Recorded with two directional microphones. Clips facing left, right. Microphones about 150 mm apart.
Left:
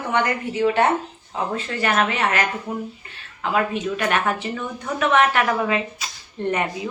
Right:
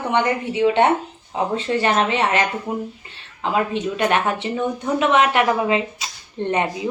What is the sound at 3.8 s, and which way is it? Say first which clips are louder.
A woman's voice: right 2 dB; 25° right (ahead or behind).